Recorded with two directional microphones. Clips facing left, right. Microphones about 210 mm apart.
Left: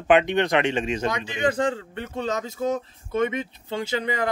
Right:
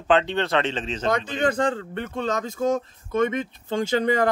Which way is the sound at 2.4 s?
50° right (ahead or behind).